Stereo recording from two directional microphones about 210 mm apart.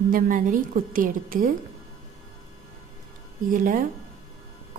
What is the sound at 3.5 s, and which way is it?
Speech, 40° right (ahead or behind).